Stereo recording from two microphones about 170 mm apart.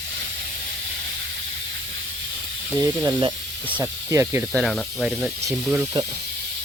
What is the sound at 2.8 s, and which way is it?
Speech, 20° right (ahead or behind).